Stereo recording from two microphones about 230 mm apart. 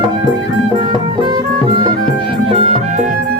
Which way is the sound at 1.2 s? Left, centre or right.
Centre.